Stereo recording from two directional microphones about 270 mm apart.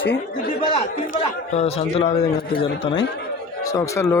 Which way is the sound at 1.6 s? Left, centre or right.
Left.